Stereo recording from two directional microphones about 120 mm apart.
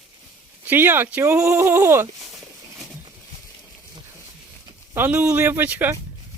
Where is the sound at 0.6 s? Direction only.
15° right (ahead or behind).